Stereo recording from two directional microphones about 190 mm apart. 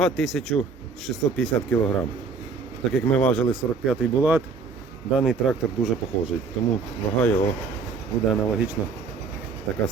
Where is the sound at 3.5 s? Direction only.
5° right (ahead or behind).